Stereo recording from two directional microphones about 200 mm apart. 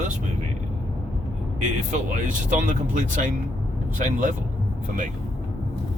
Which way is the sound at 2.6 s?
40° right (ahead or behind).